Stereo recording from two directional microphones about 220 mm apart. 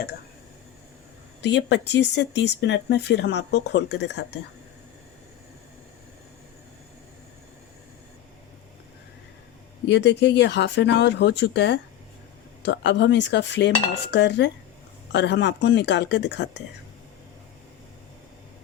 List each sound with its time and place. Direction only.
1.4 s speech: 50° left (ahead or behind)
9.9 s speech: 50° left (ahead or behind)